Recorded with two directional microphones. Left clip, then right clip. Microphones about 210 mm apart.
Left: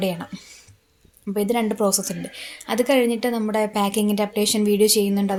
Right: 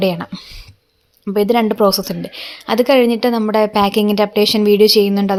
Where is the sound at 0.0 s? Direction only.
35° right (ahead or behind).